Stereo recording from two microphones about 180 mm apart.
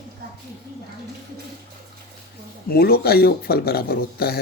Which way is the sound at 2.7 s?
60° left (ahead or behind).